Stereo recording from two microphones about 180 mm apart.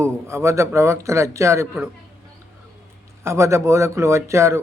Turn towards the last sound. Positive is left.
turn(degrees=-15)  # may be behind; listen again after turning